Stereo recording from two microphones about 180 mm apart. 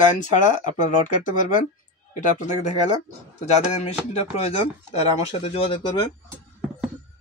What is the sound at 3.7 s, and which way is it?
Speech, 35° left (ahead or behind).